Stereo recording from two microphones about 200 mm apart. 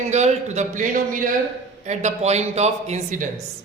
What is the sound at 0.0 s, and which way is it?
Speech, 35° right (ahead or behind).